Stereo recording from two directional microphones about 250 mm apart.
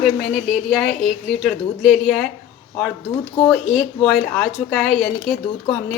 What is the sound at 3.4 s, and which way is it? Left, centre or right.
A woman's voice, centre.